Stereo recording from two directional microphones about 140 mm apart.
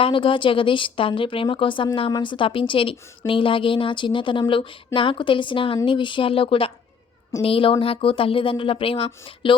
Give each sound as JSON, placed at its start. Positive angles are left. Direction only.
{"t": 0.0, "sound": "speech", "side_deg": 40}